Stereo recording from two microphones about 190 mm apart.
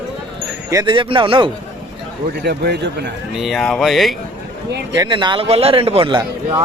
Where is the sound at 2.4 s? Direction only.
60° right (ahead or behind).